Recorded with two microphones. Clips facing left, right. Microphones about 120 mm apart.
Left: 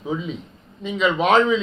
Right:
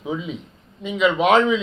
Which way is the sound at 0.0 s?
10° right (ahead or behind).